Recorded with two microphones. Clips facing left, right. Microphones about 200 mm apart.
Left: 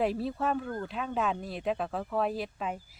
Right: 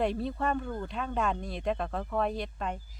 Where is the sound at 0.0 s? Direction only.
5° left (ahead or behind).